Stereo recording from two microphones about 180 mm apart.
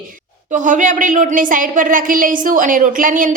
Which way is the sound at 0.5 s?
45° right (ahead or behind).